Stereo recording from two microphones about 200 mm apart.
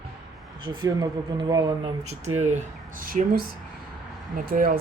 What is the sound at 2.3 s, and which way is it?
Speech, 35° right (ahead or behind).